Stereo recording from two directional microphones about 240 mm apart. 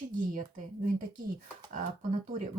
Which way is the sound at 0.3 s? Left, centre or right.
Right.